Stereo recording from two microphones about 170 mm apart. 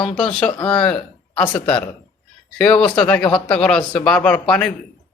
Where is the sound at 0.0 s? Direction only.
5° left (ahead or behind).